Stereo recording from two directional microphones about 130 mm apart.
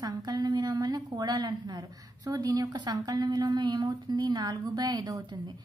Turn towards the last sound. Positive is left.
turn(degrees=-35)  # may be behind; listen again after turning